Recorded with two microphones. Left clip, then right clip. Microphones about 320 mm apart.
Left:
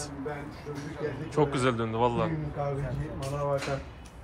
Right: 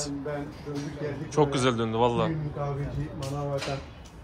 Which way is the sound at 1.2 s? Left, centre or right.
Centre.